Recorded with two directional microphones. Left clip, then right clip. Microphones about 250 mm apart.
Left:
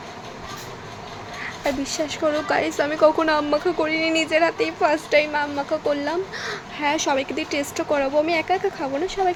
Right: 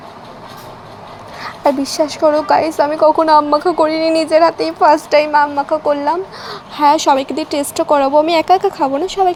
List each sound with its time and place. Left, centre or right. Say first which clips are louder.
1.6 s a woman's voice: right 11 dB; centre
5.3 s a woman's voice: right 10 dB; centre
6.7 s speech: right 11 dB; right